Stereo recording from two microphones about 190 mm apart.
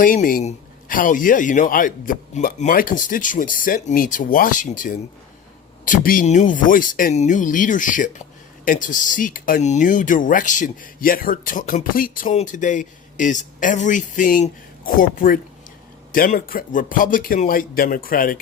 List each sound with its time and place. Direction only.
0.0 s speech: 45° left (ahead or behind)